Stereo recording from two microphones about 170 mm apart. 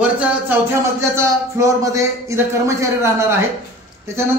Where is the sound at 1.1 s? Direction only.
15° right (ahead or behind).